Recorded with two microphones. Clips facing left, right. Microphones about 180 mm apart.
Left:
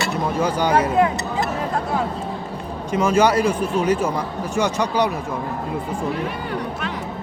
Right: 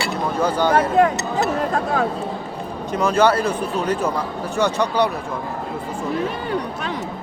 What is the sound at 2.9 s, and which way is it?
Speech, 10° left (ahead or behind).